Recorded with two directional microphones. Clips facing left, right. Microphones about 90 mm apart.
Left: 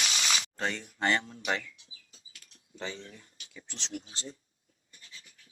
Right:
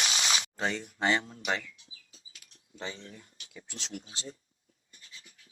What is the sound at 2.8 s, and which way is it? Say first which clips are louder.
Speech: left 1 dB; 30° right (ahead or behind).